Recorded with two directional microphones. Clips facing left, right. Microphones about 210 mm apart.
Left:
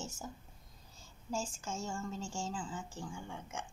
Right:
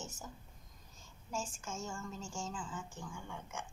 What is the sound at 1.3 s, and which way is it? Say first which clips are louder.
Speech: left 2 dB; 30° left (ahead or behind).